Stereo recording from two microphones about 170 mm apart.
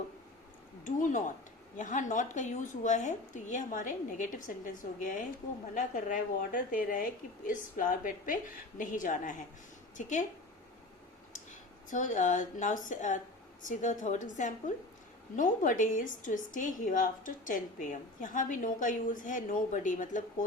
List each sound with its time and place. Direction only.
0.9 s a woman's voice: 50° left (ahead or behind)
11.9 s a woman's voice: 50° left (ahead or behind)